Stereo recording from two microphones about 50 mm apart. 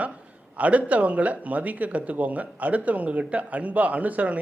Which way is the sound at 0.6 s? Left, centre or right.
Right.